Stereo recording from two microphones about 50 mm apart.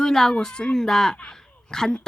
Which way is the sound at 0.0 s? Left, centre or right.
Centre.